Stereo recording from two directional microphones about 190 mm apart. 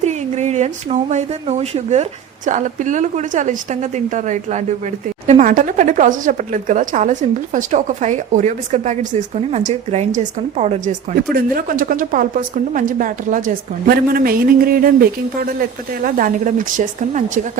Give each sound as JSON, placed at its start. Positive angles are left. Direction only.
{"t": 0.0, "sound": "a woman's voice", "side_deg": -35}
{"t": 16.0, "sound": "a woman's voice", "side_deg": -45}